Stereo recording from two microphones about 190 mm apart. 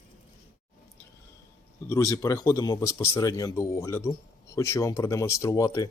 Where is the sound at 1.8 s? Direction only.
15° left (ahead or behind).